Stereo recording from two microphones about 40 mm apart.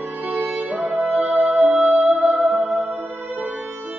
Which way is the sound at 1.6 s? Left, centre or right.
Centre.